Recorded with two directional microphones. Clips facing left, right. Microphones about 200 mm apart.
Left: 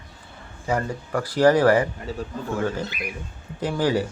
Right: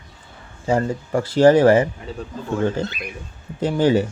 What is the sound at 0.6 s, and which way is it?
Speech, 25° right (ahead or behind).